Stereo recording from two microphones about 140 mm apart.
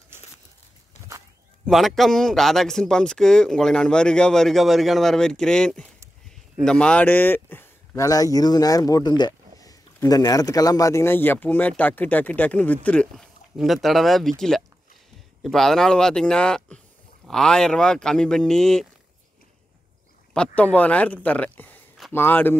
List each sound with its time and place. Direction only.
1.7 s a man's voice: centre (ahead or behind)
20.3 s speech: 10° left (ahead or behind)